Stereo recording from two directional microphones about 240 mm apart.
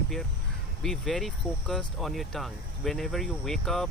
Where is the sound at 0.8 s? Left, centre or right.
Centre.